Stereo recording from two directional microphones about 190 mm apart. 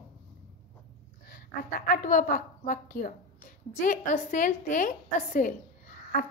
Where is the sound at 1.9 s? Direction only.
45° left (ahead or behind).